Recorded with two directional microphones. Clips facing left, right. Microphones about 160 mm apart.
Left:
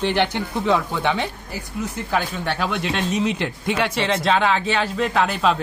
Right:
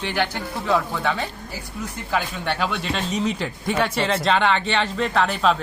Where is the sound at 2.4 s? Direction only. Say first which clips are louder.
Left 1 dB; 5° left (ahead or behind).